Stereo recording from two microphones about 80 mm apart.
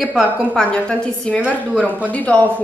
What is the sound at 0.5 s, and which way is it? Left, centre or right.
A woman's voice, centre.